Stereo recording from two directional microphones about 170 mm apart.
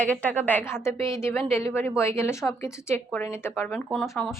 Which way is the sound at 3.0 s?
5° left (ahead or behind).